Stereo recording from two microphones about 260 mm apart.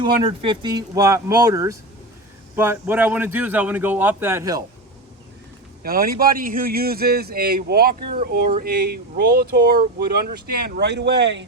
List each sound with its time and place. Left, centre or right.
0.2 s a man's voice: centre
5.8 s a man's voice: right